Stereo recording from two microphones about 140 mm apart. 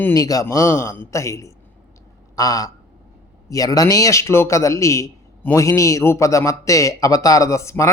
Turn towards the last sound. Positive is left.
turn(degrees=20)  # may be behind; listen again after turning